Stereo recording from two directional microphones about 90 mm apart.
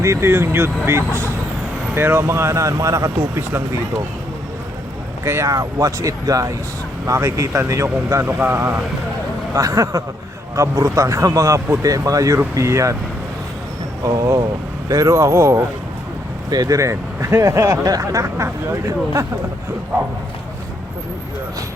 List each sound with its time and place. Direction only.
0.0 s speech: 30° right (ahead or behind)
5.2 s speech: 30° right (ahead or behind)
8.2 s speech: 25° right (ahead or behind)
9.6 s speech: 40° right (ahead or behind)
14.0 s speech: 40° right (ahead or behind)
16.5 s speech: 45° right (ahead or behind)